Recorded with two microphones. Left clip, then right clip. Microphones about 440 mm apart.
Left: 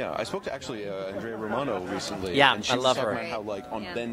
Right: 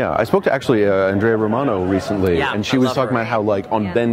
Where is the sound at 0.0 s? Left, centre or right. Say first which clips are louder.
Right 14 dB; right.